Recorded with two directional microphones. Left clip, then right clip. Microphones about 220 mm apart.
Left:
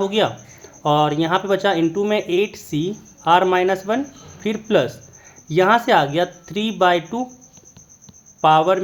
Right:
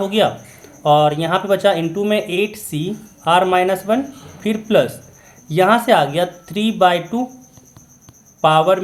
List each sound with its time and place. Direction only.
0.0 s speech: 25° left (ahead or behind)
8.4 s speech: 25° left (ahead or behind)